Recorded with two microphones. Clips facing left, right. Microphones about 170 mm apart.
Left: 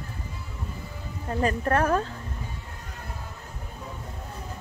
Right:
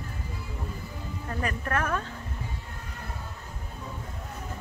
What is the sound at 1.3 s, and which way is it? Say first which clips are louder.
Speech: left 6 dB; 30° left (ahead or behind).